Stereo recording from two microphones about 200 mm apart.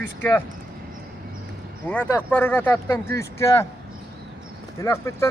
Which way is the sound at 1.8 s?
10° left (ahead or behind).